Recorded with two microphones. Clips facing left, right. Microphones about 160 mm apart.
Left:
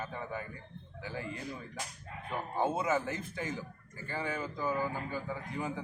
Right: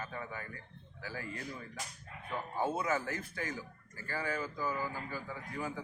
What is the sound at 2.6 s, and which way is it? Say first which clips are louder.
Speech: left 3 dB; 20° left (ahead or behind).